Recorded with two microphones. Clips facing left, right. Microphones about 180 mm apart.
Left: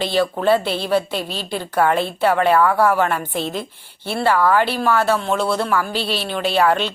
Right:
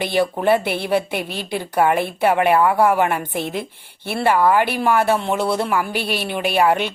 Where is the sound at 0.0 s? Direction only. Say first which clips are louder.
Even; 20° right (ahead or behind).